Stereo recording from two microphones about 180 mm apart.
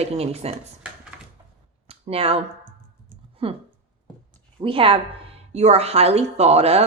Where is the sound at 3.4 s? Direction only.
30° right (ahead or behind).